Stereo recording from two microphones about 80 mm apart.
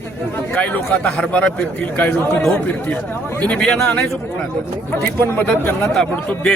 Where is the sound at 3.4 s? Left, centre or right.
Centre.